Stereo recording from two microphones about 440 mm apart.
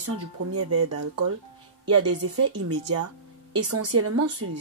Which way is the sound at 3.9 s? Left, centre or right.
Right.